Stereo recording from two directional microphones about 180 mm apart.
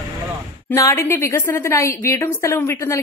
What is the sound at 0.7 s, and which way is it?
A woman's voice, 15° left (ahead or behind).